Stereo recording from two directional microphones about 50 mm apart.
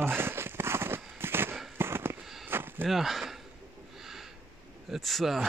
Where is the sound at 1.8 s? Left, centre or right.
Right.